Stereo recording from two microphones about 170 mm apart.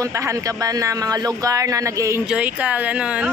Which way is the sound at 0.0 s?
20° right (ahead or behind).